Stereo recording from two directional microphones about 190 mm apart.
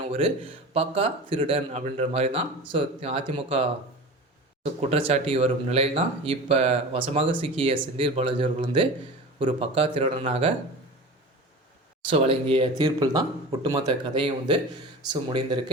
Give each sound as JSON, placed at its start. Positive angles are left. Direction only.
{"t": 0.0, "sound": "speech", "side_deg": -30}
{"t": 12.1, "sound": "speech", "side_deg": -30}